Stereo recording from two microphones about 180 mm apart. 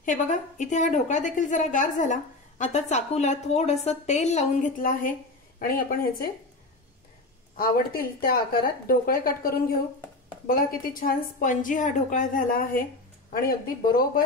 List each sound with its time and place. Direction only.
0.0 s a woman's voice: 45° left (ahead or behind)
7.5 s a woman's voice: 50° left (ahead or behind)